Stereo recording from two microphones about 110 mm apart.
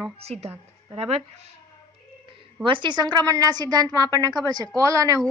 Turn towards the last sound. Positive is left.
turn(degrees=-30)  # may be behind; listen again after turning